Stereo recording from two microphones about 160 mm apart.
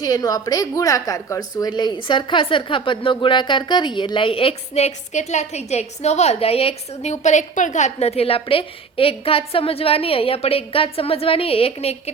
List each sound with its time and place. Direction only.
0.0 s a woman's voice: 25° left (ahead or behind); by 12.1 s 40° left (ahead or behind)